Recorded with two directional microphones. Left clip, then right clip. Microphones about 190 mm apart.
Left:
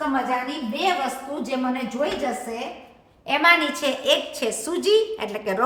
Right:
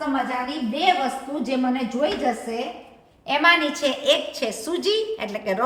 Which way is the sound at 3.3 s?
10° left (ahead or behind).